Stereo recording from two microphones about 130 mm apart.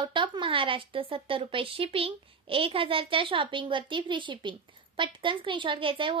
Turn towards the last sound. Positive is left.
turn(degrees=-40)  # may be behind; listen again after turning